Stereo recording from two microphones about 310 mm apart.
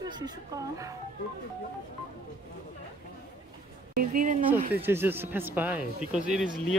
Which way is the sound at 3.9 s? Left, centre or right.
Right.